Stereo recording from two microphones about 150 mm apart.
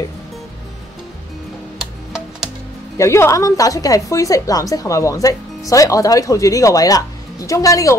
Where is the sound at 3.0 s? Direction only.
20° left (ahead or behind).